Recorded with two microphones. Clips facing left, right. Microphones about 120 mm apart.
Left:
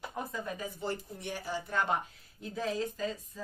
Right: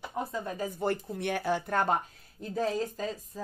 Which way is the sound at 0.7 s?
60° right (ahead or behind).